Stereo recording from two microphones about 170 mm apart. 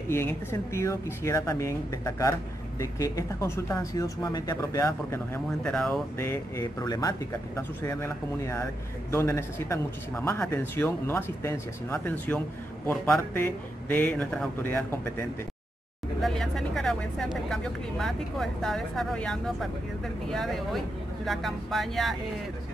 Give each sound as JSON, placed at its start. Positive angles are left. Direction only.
{"t": 0.1, "sound": "speech", "side_deg": 15}
{"t": 5.6, "sound": "speech", "side_deg": 5}
{"t": 6.1, "sound": "speech", "side_deg": 15}